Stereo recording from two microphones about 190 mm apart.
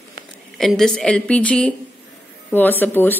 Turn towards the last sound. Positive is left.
turn(degrees=10)  # may be behind; listen again after turning